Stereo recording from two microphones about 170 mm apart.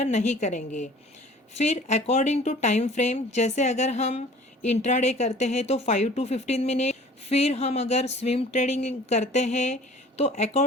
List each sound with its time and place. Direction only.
0.0 s speech: 45° left (ahead or behind)